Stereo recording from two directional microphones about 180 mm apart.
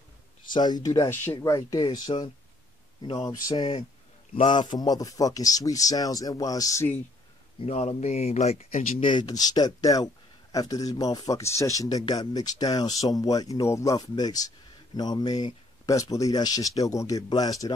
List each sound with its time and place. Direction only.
0.5 s speech: 25° left (ahead or behind)
7.6 s speech: 35° left (ahead or behind)
9.0 s speech: 25° left (ahead or behind)